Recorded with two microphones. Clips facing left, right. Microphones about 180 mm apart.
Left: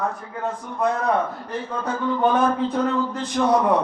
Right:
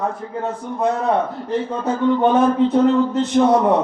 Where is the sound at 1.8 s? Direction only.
25° right (ahead or behind).